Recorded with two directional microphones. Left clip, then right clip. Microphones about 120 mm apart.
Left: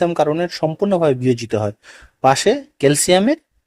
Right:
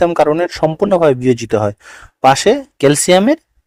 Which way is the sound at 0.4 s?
40° right (ahead or behind).